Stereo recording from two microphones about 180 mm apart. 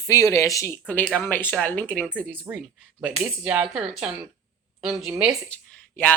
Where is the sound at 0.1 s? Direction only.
15° left (ahead or behind).